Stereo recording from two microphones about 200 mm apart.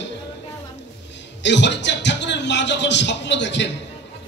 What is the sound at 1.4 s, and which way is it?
A man's voice, 60° left (ahead or behind).